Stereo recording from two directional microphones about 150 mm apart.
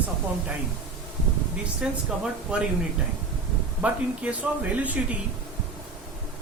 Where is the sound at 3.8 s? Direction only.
10° right (ahead or behind).